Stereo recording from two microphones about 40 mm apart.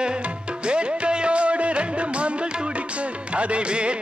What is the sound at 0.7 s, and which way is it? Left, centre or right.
Music, right.